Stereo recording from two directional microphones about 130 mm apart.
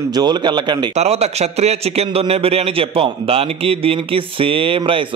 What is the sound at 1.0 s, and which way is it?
A man's voice, 55° right (ahead or behind).